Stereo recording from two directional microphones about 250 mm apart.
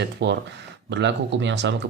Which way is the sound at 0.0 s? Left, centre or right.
Right.